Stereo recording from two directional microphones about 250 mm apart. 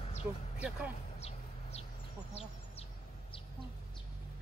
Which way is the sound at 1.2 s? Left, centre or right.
Left.